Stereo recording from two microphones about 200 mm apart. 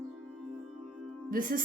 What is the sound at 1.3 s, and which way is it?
Speech, 45° right (ahead or behind).